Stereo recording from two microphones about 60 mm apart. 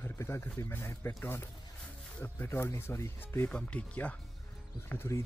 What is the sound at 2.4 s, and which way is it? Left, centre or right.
Speech, left.